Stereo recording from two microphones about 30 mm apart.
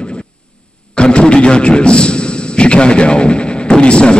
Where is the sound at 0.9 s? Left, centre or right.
Left.